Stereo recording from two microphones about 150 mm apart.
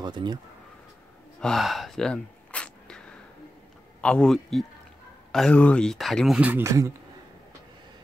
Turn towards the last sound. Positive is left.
turn(degrees=-20)  # may be behind; listen again after turning